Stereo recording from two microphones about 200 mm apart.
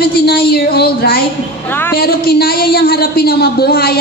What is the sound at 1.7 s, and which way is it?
Speech, 10° left (ahead or behind).